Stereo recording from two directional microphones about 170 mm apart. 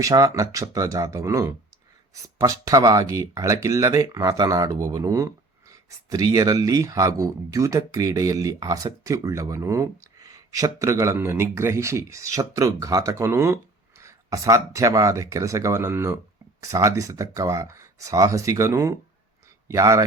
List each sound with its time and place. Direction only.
0.0 s speech: 20° right (ahead or behind)